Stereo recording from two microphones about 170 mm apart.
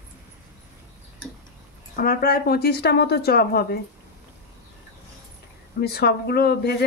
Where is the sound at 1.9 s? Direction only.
60° left (ahead or behind).